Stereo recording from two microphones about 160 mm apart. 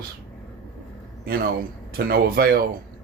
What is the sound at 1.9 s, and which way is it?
Speech, 70° right (ahead or behind).